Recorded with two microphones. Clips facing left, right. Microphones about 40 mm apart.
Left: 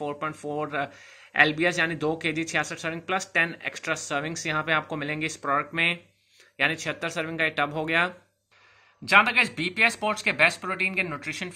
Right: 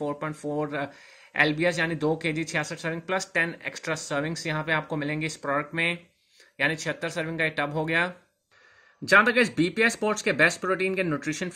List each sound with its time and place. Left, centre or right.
0.0 s speech: left
5.4 s speech: left
6.5 s speech: left
9.3 s speech: left